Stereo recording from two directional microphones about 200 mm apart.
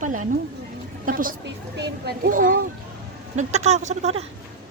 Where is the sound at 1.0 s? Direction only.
45° right (ahead or behind).